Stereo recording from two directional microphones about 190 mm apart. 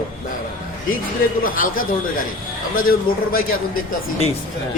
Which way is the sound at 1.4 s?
50° left (ahead or behind).